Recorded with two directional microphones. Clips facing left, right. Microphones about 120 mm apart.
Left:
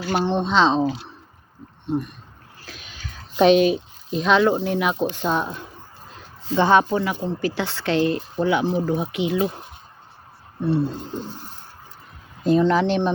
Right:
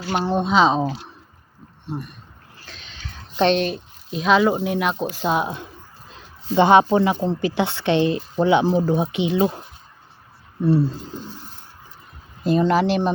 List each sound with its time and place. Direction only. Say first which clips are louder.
0.1 s speech: right 1 dB; 5° right (ahead or behind)
1.9 s speech: left 6 dB; 5° right (ahead or behind)
2.7 s speech: right 1 dB; 10° left (ahead or behind); by 5.5 s 10° right (ahead or behind)
6.6 s speech: right 3 dB; 20° right (ahead or behind)
12.4 s speech: even; 10° right (ahead or behind)